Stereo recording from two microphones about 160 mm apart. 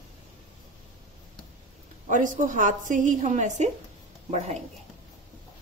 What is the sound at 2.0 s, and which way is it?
A woman's voice, 50° right (ahead or behind).